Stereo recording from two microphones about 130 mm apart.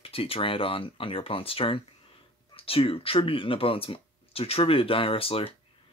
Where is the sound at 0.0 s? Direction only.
45° left (ahead or behind).